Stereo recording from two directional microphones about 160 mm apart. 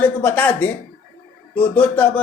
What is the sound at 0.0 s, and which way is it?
Speech, 10° left (ahead or behind).